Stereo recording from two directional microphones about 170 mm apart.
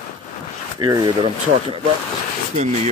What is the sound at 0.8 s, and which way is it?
Speech, 25° right (ahead or behind).